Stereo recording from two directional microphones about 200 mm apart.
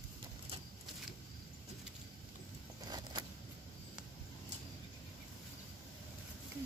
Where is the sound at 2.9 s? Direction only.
20° right (ahead or behind).